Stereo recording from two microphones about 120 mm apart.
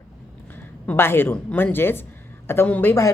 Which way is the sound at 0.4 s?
15° left (ahead or behind).